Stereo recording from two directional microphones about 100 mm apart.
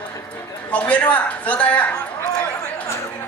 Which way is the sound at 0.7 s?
15° left (ahead or behind).